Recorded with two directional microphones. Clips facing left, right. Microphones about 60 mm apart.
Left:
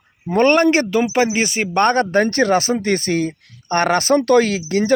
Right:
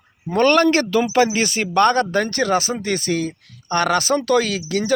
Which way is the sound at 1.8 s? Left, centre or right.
Left.